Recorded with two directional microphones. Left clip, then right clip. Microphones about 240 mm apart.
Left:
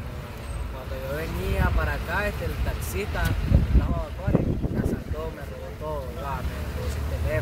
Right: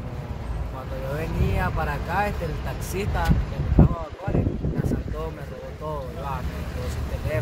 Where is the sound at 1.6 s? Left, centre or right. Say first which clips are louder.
Right 1 dB; centre.